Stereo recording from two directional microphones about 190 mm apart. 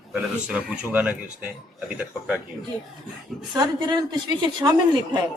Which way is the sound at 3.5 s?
20° right (ahead or behind).